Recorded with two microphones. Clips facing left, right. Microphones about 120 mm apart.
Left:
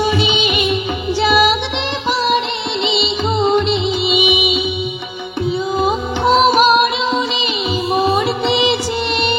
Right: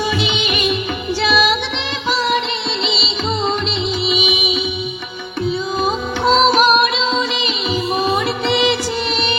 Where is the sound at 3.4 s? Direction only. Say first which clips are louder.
Left 5 dB; 15° left (ahead or behind).